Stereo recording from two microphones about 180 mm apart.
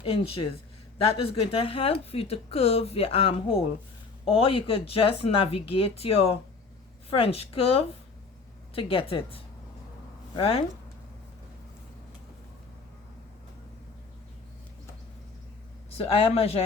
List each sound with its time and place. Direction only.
0.0 s speech: 30° left (ahead or behind)
16.0 s speech: 30° left (ahead or behind)